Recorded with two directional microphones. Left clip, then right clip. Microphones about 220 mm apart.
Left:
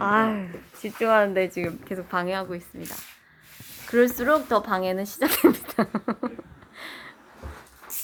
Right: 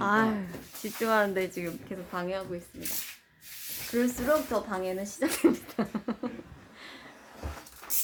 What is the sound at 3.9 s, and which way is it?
Speech, 45° left (ahead or behind).